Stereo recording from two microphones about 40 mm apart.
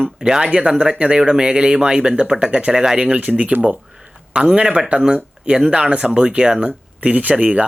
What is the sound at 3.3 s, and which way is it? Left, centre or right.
Speech, right.